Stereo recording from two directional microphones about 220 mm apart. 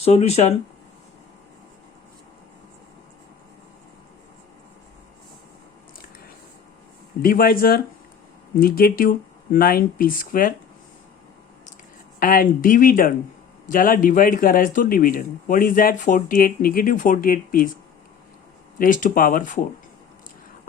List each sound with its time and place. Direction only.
0.0 s speech: 30° left (ahead or behind)
7.2 s a man's voice: 40° left (ahead or behind)
12.2 s a man's voice: 40° left (ahead or behind)
18.8 s a man's voice: 35° left (ahead or behind)